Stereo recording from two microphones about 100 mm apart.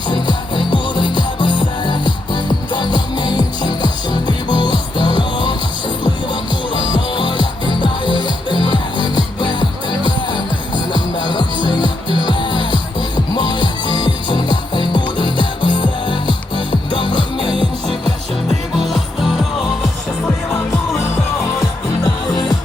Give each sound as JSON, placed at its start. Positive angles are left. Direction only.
{"t": 0.1, "sound": "music", "side_deg": 50}
{"t": 6.7, "sound": "music", "side_deg": 50}
{"t": 18.9, "sound": "music", "side_deg": 0}